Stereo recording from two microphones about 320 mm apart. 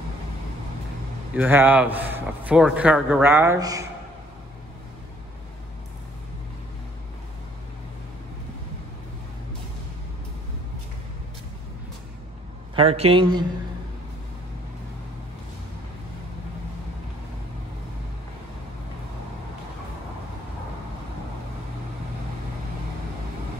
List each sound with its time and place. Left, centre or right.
1.3 s a man's voice: centre
12.7 s speech: centre